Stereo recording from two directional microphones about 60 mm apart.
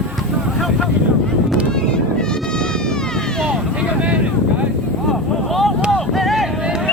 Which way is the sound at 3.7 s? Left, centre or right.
Right.